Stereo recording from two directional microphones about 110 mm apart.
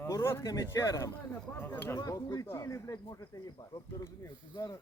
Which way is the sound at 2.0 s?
35° left (ahead or behind).